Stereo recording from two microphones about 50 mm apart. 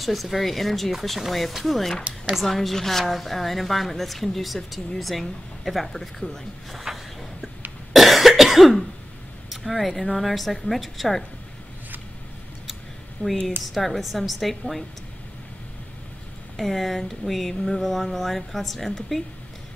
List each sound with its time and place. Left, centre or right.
0.0 s a woman's voice: centre
7.9 s cough: centre
9.5 s a woman's voice: centre
13.2 s speech: left
13.7 s a woman's voice: centre
16.5 s a woman's voice: centre